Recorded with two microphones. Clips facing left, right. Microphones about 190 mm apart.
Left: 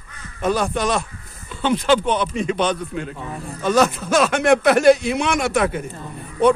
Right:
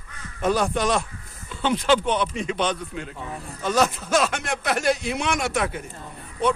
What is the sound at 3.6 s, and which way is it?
Speech, 60° left (ahead or behind).